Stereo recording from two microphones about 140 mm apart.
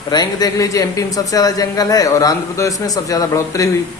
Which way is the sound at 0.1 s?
30° left (ahead or behind).